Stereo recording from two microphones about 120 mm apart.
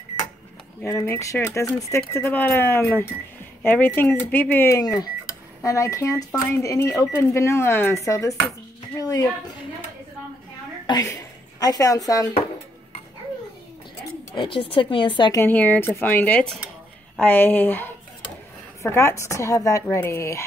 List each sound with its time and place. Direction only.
0.8 s speech: 20° left (ahead or behind)
2.1 s speech: 15° left (ahead or behind)
4.7 s speech: 30° left (ahead or behind)
8.9 s a sound: 30° left (ahead or behind)
10.9 s speech: 30° left (ahead or behind)
14.3 s speech: 45° left (ahead or behind)
15.3 s speech: 15° left (ahead or behind)